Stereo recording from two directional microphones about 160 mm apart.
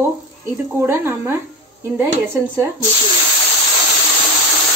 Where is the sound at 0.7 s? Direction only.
15° right (ahead or behind).